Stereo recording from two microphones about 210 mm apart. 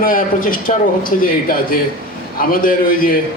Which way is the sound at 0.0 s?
40° left (ahead or behind).